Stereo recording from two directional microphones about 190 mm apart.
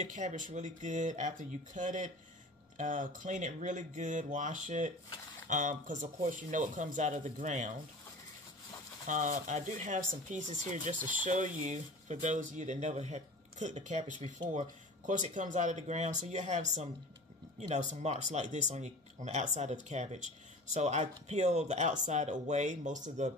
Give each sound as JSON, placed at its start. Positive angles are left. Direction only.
{"t": 0.0, "sound": "speech", "side_deg": -40}
{"t": 9.0, "sound": "speech", "side_deg": -40}